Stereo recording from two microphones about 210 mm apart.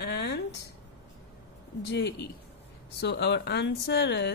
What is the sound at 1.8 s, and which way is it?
Speech, 55° left (ahead or behind).